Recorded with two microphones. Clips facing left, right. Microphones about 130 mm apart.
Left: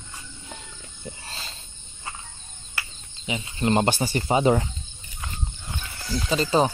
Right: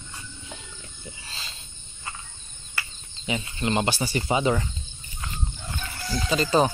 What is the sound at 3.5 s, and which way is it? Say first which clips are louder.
Speech: left 5 dB; 40° left (ahead or behind).